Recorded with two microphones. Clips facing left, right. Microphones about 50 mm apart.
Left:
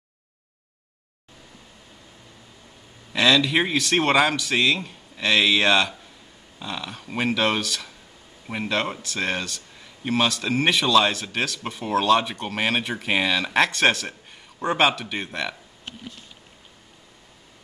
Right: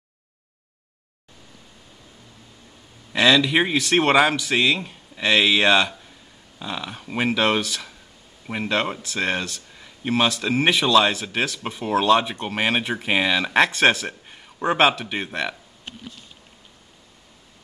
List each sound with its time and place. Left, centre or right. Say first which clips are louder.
3.1 s speech: right 2 dB; centre